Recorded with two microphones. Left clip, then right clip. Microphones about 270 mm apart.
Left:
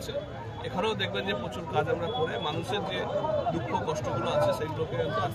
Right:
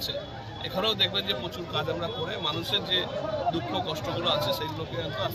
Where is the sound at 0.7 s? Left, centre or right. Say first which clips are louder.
Right 4 dB; centre.